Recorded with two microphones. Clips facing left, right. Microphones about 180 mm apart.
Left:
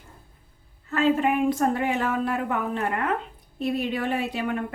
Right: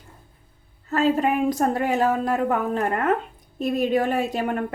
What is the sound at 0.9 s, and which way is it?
A woman's voice, 40° right (ahead or behind).